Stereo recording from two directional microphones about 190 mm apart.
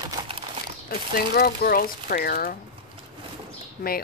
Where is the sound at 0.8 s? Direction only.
50° left (ahead or behind).